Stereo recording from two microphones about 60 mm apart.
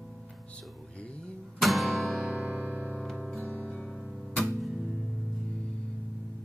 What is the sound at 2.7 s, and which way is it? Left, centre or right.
Music, left.